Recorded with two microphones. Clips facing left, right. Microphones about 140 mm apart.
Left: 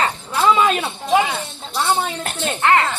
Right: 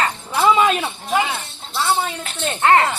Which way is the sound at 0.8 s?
5° left (ahead or behind).